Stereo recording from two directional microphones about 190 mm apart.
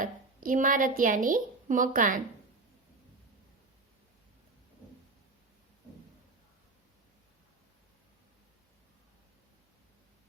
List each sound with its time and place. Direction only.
0.0 s a woman's voice: 45° right (ahead or behind)